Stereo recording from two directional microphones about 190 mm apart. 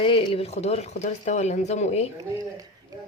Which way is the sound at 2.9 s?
20° right (ahead or behind).